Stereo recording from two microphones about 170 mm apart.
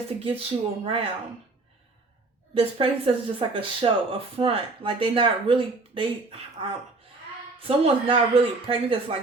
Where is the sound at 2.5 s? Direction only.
35° right (ahead or behind).